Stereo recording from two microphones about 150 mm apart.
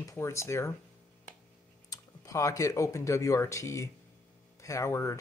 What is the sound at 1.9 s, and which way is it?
Speech, 20° left (ahead or behind).